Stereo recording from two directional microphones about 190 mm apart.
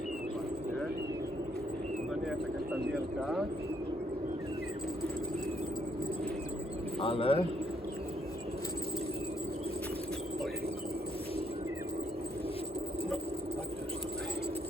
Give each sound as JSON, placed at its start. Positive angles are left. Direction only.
{"t": 2.9, "sound": "speech", "side_deg": 0}
{"t": 7.0, "sound": "a man's voice", "side_deg": 30}